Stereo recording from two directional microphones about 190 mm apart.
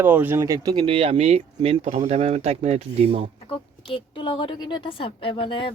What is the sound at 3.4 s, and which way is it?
A woman's voice, 30° left (ahead or behind).